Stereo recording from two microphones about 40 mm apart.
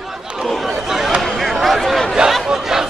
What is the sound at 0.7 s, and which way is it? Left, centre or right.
Chatter, centre.